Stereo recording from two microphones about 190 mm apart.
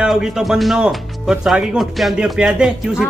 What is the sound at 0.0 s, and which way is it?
Speech, 5° right (ahead or behind).